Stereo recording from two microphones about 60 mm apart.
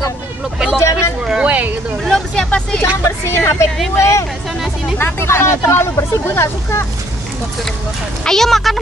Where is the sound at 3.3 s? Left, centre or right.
Left.